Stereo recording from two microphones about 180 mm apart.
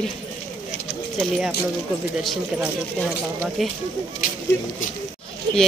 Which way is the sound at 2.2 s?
Centre (ahead or behind).